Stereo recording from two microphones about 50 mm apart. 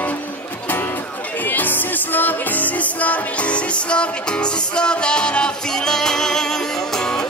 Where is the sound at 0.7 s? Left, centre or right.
Left; by 7.3 s centre.